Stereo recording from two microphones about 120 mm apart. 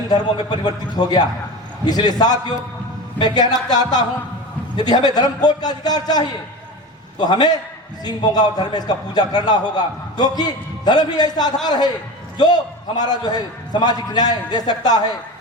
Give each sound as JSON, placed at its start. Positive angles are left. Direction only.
{"t": 0.1, "sound": "a man's voice", "side_deg": 35}
{"t": 13.0, "sound": "a man's voice", "side_deg": 35}